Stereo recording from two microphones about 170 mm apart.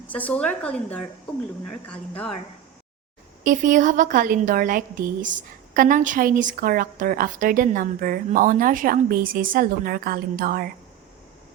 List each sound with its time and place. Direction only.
0.1 s a woman's voice: 10° left (ahead or behind)
3.4 s a woman's voice: 50° right (ahead or behind)